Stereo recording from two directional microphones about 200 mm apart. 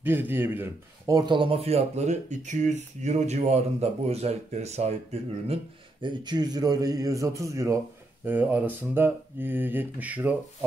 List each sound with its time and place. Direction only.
0.0 s speech: 10° right (ahead or behind); by 4.9 s 35° right (ahead or behind)
6.0 s speech: 20° right (ahead or behind)